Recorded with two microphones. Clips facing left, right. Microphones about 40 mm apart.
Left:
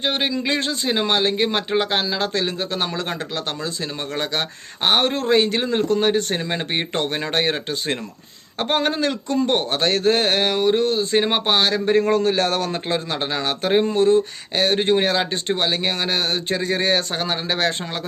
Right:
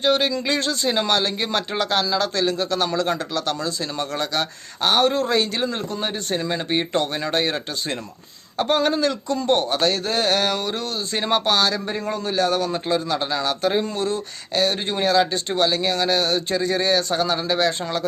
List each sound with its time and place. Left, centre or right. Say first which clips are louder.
0.0 s a man's voice: right 2 dB; left
6.0 s speech: left 5 dB; left